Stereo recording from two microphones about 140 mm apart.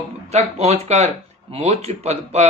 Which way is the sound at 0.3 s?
50° right (ahead or behind).